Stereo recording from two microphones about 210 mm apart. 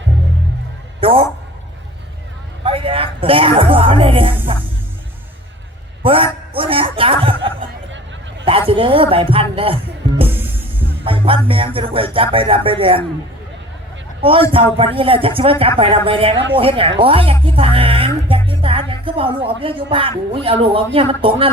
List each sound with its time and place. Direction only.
1.0 s a sound: 25° right (ahead or behind)
2.6 s music: 25° right (ahead or behind)
6.0 s a man's voice: 25° right (ahead or behind)
8.4 s speech: 25° right (ahead or behind)
11.0 s music: 25° right (ahead or behind)
14.2 s a man's voice: 25° right (ahead or behind)
14.5 s music: 25° right (ahead or behind)
17.4 s speech: 25° right (ahead or behind)